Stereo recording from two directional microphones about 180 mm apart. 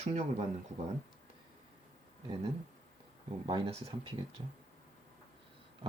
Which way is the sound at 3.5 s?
30° right (ahead or behind).